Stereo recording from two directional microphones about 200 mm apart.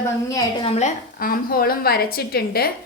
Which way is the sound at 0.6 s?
30° left (ahead or behind).